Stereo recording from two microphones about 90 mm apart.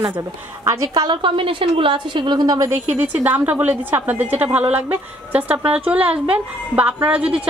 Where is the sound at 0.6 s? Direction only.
40° right (ahead or behind).